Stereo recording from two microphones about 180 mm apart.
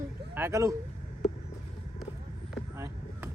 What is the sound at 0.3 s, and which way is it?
Speech, 15° right (ahead or behind).